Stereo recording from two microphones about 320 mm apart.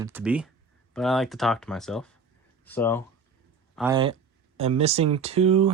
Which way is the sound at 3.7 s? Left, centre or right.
Centre.